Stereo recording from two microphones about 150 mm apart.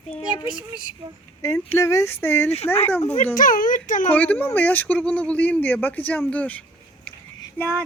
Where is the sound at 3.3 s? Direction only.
65° left (ahead or behind).